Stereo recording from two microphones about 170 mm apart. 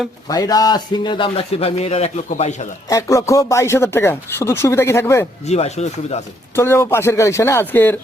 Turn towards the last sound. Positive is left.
turn(degrees=10)  # may be behind; listen again after turning